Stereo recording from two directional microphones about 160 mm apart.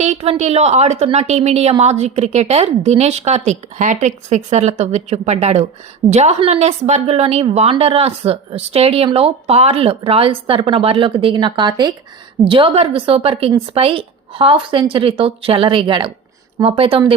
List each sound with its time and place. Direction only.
0.0 s a woman's voice: 40° right (ahead or behind)